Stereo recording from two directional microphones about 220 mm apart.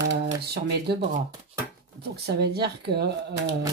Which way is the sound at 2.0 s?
50° right (ahead or behind).